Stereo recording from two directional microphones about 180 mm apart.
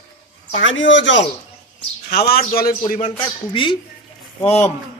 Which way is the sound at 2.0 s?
60° left (ahead or behind).